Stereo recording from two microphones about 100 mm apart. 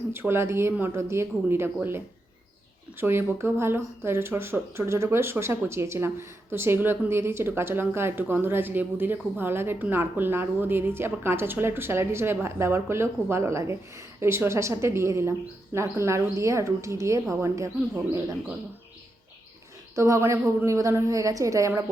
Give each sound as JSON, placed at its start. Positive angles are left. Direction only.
{"t": 0.1, "sound": "speech", "side_deg": -25}
{"t": 3.0, "sound": "a woman's voice", "side_deg": -25}
{"t": 20.0, "sound": "a woman's voice", "side_deg": -30}